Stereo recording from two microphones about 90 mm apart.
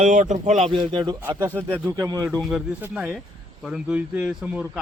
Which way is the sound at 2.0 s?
50° right (ahead or behind).